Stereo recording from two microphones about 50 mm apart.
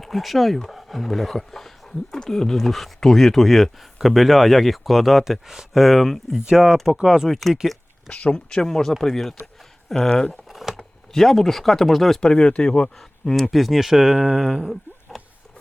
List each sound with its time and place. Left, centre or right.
0.0 s speech: centre
6.3 s speech: centre
7.5 s a sound: centre
8.1 s speech: centre
10.5 s a sound: centre
11.1 s speech: centre
12.2 s speech: centre
13.0 s speech: centre